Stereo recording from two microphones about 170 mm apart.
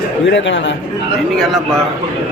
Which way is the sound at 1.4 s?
Centre (ahead or behind).